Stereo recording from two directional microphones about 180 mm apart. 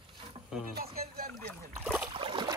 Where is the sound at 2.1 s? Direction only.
30° right (ahead or behind).